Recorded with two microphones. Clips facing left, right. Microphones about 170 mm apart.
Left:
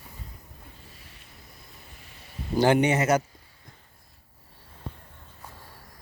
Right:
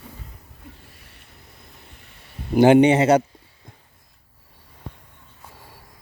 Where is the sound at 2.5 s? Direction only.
20° right (ahead or behind).